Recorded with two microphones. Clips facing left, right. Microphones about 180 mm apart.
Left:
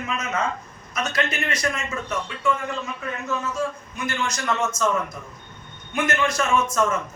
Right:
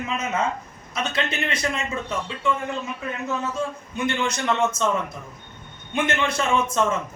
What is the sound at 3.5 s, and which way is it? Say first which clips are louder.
A man's voice: left 1 dB; 30° right (ahead or behind).